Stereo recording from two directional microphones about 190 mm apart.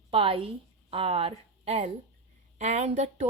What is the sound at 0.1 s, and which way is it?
A woman's voice, 30° right (ahead or behind).